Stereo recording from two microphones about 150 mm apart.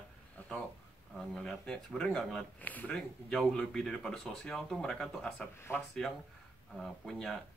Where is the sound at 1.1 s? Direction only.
5° left (ahead or behind).